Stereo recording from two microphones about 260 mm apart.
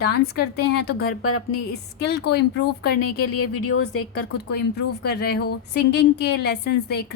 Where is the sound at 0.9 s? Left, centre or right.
Left.